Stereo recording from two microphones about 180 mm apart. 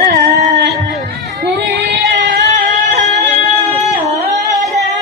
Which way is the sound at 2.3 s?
50° right (ahead or behind).